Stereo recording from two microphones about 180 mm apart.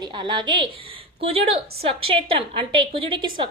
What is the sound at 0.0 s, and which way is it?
A woman's voice, 25° right (ahead or behind).